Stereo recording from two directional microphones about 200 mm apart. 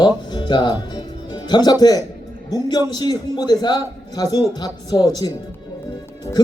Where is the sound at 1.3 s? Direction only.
20° left (ahead or behind).